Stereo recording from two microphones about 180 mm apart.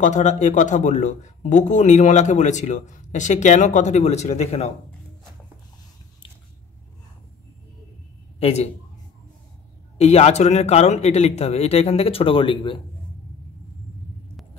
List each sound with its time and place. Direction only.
0.0 s speech: 40° left (ahead or behind)
8.4 s speech: 35° left (ahead or behind)
9.9 s speech: 35° left (ahead or behind)